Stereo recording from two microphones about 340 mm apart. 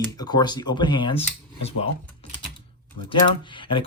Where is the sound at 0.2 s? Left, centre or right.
Centre.